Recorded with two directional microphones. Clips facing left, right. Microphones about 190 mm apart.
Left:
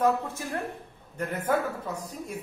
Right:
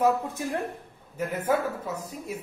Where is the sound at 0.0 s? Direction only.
15° right (ahead or behind).